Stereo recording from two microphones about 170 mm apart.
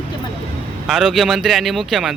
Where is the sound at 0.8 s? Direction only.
Centre (ahead or behind).